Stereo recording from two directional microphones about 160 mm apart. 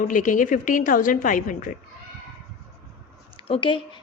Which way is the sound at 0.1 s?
55° left (ahead or behind).